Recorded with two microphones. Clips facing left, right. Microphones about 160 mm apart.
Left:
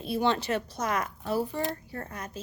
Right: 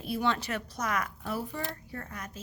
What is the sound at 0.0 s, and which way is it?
A woman's voice, 25° left (ahead or behind).